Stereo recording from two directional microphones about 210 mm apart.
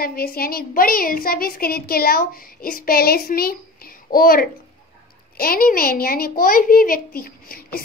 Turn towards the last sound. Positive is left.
turn(degrees=45)  # may be behind; listen again after turning